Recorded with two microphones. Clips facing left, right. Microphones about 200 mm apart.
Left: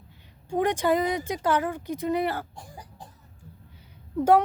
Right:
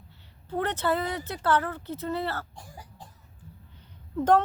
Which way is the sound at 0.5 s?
15° left (ahead or behind).